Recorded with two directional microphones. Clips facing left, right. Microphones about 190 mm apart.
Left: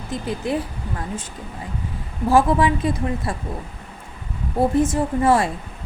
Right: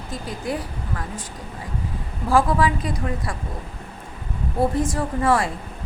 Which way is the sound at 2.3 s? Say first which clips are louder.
Left 2 dB; 25° left (ahead or behind).